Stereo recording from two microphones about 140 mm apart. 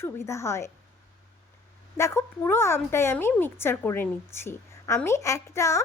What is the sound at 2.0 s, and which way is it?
A woman's voice, 20° left (ahead or behind).